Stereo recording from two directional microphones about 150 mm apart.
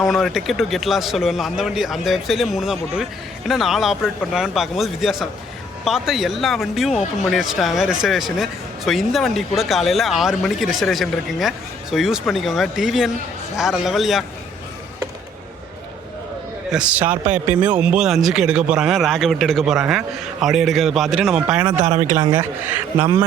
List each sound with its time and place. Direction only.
0.0 s speech: centre (ahead or behind)
16.7 s speech: 10° right (ahead or behind)
21.8 s speech: 55° right (ahead or behind)
22.1 s speech: 20° right (ahead or behind)